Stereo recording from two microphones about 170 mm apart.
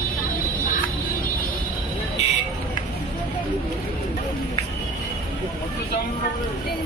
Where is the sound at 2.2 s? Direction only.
40° left (ahead or behind).